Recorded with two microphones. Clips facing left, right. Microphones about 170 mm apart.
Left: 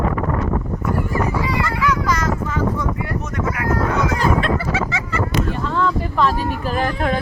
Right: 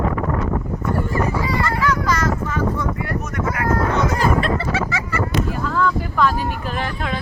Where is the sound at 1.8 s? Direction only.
15° left (ahead or behind).